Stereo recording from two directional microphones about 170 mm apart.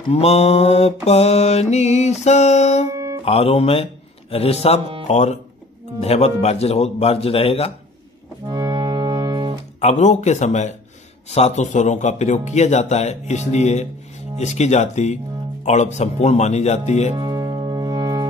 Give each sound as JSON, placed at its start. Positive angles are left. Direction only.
{"t": 0.1, "sound": "mantra", "side_deg": 40}
{"t": 5.0, "sound": "speech", "side_deg": 40}
{"t": 5.9, "sound": "mantra", "side_deg": 40}
{"t": 8.5, "sound": "music", "side_deg": -25}
{"t": 9.8, "sound": "speech", "side_deg": 40}
{"t": 11.2, "sound": "mantra", "side_deg": 40}
{"t": 14.4, "sound": "speech", "side_deg": 40}
{"t": 15.6, "sound": "mantra", "side_deg": 40}
{"t": 17.1, "sound": "music", "side_deg": -20}